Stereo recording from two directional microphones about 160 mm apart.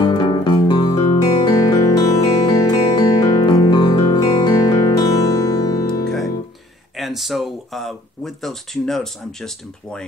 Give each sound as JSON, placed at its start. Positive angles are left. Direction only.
{"t": 0.0, "sound": "music", "side_deg": 30}
{"t": 7.0, "sound": "speech", "side_deg": 0}